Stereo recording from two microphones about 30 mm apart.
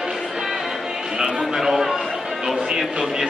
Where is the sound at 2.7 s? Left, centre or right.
Right.